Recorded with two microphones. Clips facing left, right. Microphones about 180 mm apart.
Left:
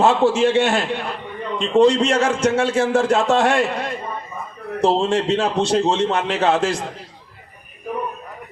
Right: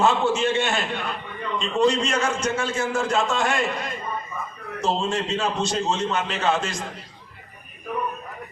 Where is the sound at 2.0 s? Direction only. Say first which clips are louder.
Left 7 dB; 70° left (ahead or behind).